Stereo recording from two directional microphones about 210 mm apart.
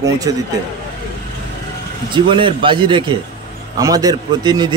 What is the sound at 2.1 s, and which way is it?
Speech, 25° right (ahead or behind).